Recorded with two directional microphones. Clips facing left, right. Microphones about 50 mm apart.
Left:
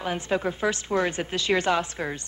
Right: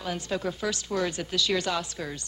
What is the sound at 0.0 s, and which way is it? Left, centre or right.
A woman's voice, left.